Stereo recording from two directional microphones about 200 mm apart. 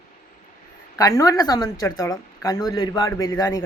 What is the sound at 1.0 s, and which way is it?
A woman's voice, 15° left (ahead or behind).